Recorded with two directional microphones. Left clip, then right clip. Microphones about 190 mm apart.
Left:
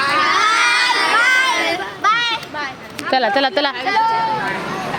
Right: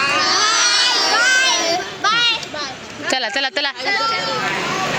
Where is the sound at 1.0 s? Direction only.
Centre (ahead or behind).